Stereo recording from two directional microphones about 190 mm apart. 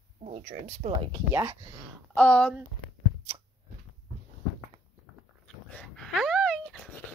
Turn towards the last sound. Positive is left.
turn(degrees=5)  # may be behind; listen again after turning